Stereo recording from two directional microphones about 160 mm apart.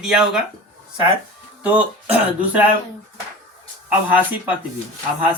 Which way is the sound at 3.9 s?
10° right (ahead or behind).